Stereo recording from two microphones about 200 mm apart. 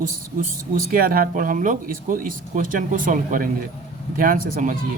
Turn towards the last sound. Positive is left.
turn(degrees=-45)  # may be behind; listen again after turning